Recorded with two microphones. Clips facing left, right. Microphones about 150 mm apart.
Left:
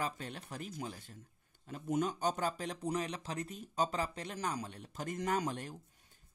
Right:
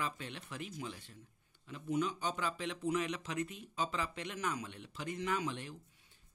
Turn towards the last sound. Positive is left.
turn(degrees=45)  # may be behind; listen again after turning